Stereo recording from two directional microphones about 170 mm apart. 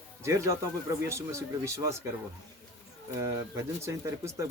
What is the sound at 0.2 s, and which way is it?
Speech, 15° right (ahead or behind).